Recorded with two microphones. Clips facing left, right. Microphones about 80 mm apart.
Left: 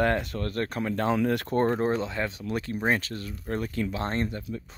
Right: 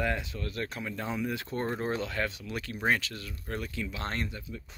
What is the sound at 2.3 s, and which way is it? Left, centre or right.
Speech, left.